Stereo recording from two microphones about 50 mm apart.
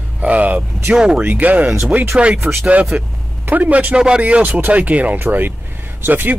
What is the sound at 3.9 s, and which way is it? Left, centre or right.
Speech, centre.